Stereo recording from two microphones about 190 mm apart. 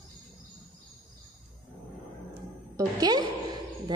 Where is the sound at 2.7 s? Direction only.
20° right (ahead or behind).